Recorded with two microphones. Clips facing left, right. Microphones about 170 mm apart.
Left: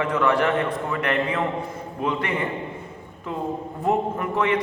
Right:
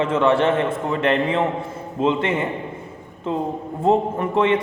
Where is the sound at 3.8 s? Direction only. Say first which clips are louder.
Right 5 dB; 25° right (ahead or behind).